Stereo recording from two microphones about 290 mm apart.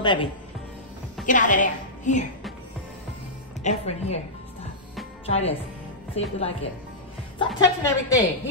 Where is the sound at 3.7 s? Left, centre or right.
Left.